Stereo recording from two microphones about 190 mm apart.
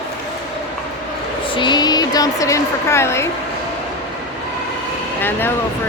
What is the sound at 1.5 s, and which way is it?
A woman's voice, 25° left (ahead or behind).